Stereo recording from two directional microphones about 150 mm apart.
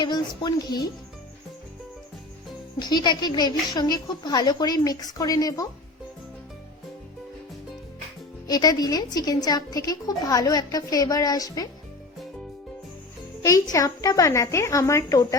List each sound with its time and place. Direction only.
0.0 s a woman's voice: 30° left (ahead or behind)
2.7 s a woman's voice: 30° left (ahead or behind)
8.4 s a woman's voice: 25° left (ahead or behind)
13.4 s a woman's voice: 20° left (ahead or behind)